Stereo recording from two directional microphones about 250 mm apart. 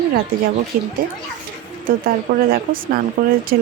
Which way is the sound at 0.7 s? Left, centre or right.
Right.